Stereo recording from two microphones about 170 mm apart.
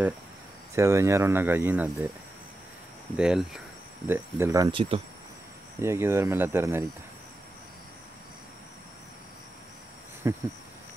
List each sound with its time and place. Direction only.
0.7 s speech: 15° right (ahead or behind)
3.2 s speech: 5° right (ahead or behind)
4.1 s speech: 15° right (ahead or behind)
4.6 s speech: 30° right (ahead or behind)
5.8 s speech: 15° right (ahead or behind)
10.2 s speech: 15° right (ahead or behind)